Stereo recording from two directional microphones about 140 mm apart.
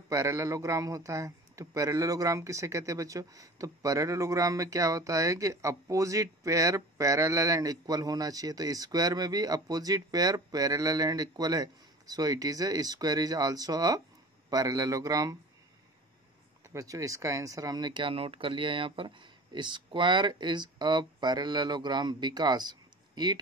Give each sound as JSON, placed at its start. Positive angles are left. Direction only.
{"t": 0.1, "sound": "a man's voice", "side_deg": -25}
{"t": 16.6, "sound": "speech", "side_deg": -25}